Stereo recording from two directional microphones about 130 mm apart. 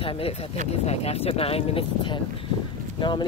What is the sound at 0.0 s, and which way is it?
Speech, 45° left (ahead or behind).